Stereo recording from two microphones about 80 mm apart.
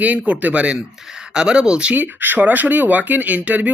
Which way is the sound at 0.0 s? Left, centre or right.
Centre.